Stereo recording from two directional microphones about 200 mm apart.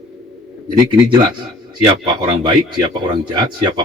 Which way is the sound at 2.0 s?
20° right (ahead or behind).